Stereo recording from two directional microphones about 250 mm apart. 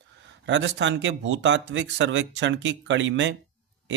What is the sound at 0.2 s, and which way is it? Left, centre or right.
Speech, right.